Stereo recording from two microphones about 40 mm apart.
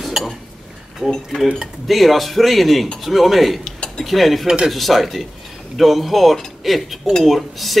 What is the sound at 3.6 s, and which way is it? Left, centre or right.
Cutlery, left.